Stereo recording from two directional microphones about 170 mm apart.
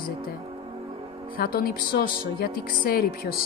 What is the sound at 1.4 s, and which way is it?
Speech, 60° left (ahead or behind).